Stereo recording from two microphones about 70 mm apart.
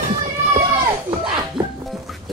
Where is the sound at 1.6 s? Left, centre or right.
Right.